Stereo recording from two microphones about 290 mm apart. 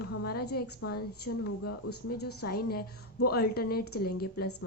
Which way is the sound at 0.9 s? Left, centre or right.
Left.